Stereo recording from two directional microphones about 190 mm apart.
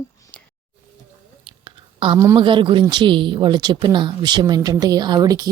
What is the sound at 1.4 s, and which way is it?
Whispering, 25° right (ahead or behind).